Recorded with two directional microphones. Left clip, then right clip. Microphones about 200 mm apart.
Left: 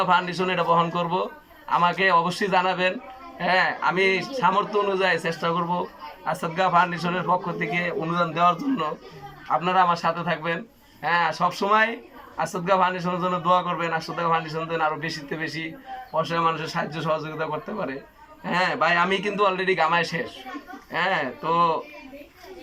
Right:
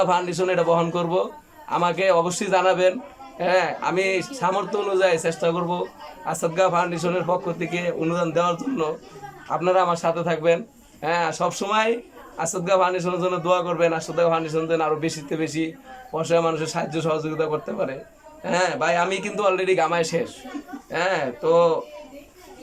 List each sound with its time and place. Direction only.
0.0 s a man's voice: 15° right (ahead or behind)